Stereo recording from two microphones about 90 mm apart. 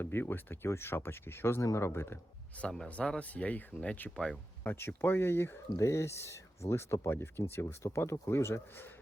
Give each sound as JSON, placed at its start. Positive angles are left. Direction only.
{"t": 0.0, "sound": "speech", "side_deg": 25}
{"t": 2.6, "sound": "speech", "side_deg": 10}
{"t": 4.6, "sound": "speech", "side_deg": 25}